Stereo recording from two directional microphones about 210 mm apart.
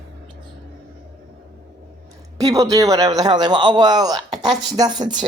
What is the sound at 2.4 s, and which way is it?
A man's voice, 15° right (ahead or behind).